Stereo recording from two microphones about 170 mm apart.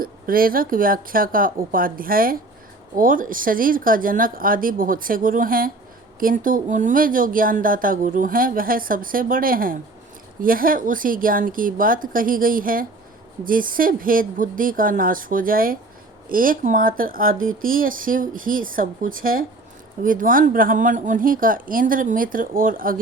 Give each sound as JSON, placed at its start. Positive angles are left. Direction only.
{"t": 0.0, "sound": "a woman's voice", "side_deg": -60}